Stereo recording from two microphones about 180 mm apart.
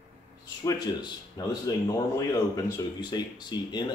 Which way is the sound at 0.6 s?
20° left (ahead or behind).